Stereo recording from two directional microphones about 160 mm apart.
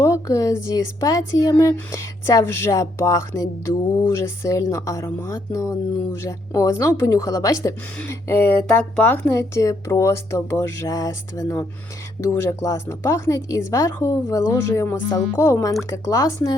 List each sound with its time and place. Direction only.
0.0 s a woman's voice: 20° left (ahead or behind)